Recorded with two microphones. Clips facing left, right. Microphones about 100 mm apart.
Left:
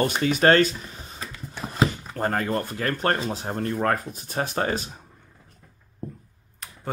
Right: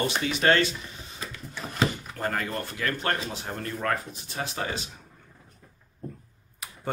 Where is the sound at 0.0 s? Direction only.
45° left (ahead or behind).